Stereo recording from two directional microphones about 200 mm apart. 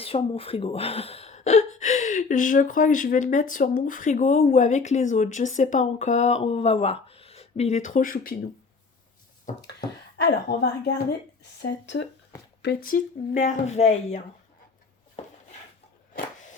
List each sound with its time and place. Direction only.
0.0 s speech: 30° left (ahead or behind); by 8.4 s 45° left (ahead or behind)
10.2 s speech: 60° left (ahead or behind)
12.6 s speech: 45° left (ahead or behind)
15.2 s a sound: 35° left (ahead or behind)